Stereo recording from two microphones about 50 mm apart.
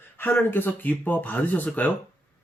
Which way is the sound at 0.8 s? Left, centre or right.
Left.